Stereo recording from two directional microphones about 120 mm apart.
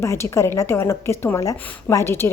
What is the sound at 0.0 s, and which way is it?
A woman's voice, 25° left (ahead or behind).